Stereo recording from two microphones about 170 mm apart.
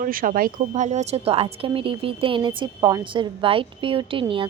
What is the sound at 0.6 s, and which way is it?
Speech, 40° right (ahead or behind).